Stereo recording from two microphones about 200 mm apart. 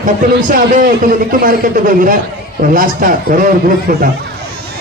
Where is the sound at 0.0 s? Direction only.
40° right (ahead or behind).